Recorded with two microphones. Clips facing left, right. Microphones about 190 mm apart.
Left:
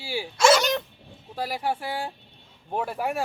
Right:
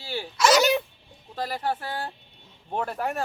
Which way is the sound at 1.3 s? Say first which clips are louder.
Even; 10° left (ahead or behind).